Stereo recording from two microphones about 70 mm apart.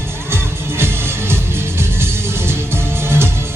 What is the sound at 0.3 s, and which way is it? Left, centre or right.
Music, right.